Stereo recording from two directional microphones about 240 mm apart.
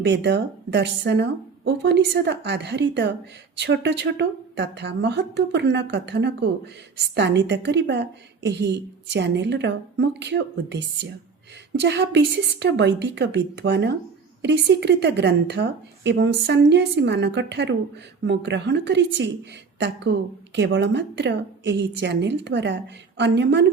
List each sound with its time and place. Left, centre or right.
0.0 s speech: right